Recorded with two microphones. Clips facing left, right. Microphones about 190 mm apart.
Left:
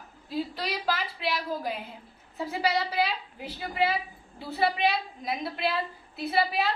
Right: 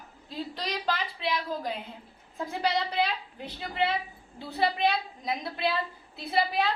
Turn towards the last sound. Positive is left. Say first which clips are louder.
# left 1 dB
turn(degrees=0)  # may be behind; listen again after turning